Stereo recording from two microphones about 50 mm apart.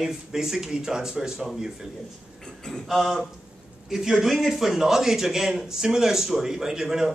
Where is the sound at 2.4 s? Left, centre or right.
Centre.